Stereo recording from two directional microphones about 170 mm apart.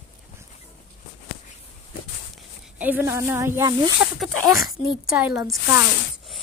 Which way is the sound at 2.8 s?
10° right (ahead or behind).